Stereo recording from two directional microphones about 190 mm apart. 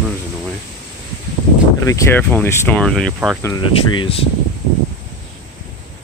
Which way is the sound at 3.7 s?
30° left (ahead or behind).